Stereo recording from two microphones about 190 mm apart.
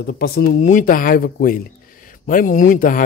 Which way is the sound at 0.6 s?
40° left (ahead or behind).